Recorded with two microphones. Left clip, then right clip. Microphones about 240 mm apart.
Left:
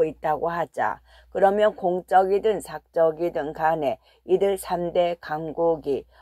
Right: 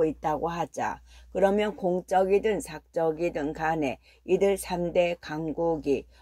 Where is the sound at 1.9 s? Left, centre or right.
Left.